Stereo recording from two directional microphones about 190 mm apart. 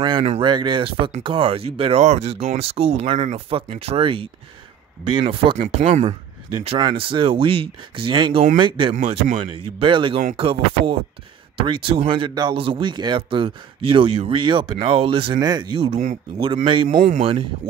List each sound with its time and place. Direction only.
0.0 s speech: 30° right (ahead or behind)